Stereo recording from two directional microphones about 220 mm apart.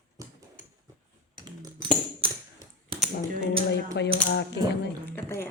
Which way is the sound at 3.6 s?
50° left (ahead or behind).